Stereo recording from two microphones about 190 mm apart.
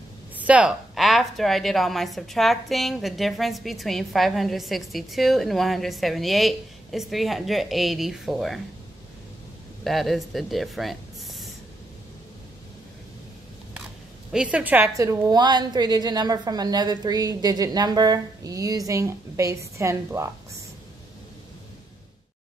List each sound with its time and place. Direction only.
0.4 s a woman's voice: 5° right (ahead or behind)
9.8 s speech: centre (ahead or behind)
14.3 s a woman's voice: 5° right (ahead or behind)